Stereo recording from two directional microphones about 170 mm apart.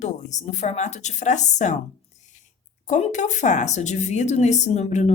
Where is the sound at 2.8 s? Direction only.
45° left (ahead or behind).